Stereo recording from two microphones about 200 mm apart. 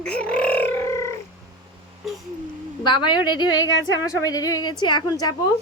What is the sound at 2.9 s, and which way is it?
Speech, 20° left (ahead or behind).